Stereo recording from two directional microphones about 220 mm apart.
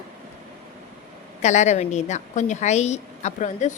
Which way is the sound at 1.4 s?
30° left (ahead or behind).